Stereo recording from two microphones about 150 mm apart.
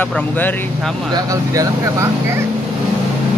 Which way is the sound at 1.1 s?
25° right (ahead or behind).